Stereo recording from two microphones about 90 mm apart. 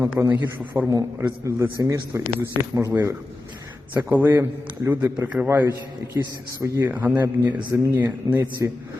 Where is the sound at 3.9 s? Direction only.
20° right (ahead or behind).